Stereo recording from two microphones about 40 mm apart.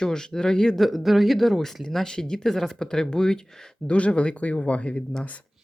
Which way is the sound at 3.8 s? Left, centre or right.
Left.